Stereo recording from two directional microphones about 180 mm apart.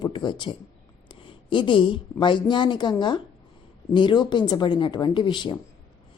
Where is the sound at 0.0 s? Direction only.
25° left (ahead or behind).